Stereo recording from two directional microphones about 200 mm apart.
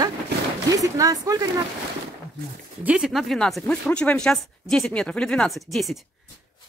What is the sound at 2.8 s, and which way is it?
Speech, 5° right (ahead or behind).